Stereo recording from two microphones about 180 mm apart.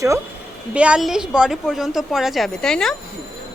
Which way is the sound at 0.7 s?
5° right (ahead or behind).